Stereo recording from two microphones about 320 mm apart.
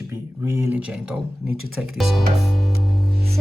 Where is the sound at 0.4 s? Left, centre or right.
Centre.